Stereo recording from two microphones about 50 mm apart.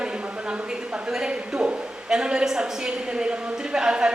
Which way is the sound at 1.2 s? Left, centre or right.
Centre.